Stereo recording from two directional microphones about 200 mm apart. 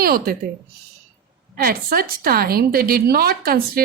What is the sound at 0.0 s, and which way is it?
Speech, 50° right (ahead or behind).